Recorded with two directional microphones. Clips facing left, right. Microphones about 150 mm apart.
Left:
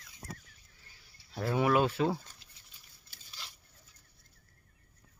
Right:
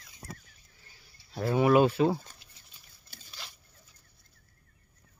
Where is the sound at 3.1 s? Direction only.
60° right (ahead or behind).